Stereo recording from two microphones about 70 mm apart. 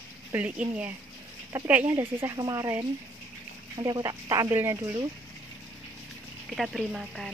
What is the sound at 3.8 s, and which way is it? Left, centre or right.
Speech, right.